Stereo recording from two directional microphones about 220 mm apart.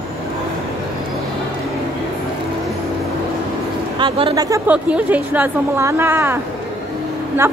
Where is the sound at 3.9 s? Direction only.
20° right (ahead or behind).